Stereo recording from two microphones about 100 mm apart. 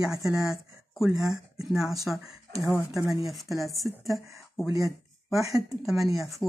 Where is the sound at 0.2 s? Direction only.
5° right (ahead or behind).